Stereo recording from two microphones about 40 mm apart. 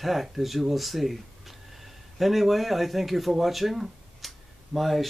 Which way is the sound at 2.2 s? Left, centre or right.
Centre.